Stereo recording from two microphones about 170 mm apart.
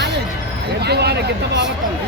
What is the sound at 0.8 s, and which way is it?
Speech, 75° right (ahead or behind).